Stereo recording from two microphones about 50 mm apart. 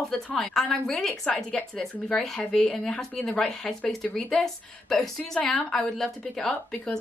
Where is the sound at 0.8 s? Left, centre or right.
Centre.